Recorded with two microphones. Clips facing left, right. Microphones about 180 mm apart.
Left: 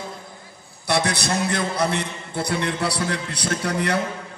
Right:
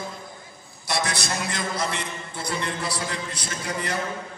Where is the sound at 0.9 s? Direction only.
60° left (ahead or behind).